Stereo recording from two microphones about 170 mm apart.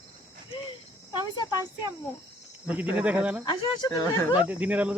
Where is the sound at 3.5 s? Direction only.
25° left (ahead or behind).